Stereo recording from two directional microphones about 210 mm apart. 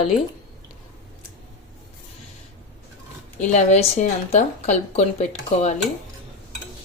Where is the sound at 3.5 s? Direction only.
30° left (ahead or behind).